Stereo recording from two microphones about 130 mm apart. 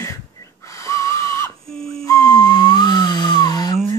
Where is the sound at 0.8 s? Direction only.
20° left (ahead or behind).